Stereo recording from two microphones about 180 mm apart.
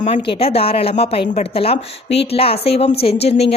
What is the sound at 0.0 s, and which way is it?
Speech, 35° left (ahead or behind).